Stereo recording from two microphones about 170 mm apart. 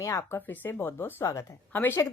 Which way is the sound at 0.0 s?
15° left (ahead or behind).